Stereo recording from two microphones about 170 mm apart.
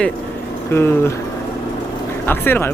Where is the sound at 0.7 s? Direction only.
15° left (ahead or behind).